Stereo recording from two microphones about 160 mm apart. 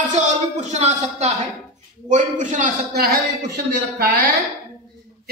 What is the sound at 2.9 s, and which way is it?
Speech, 75° right (ahead or behind).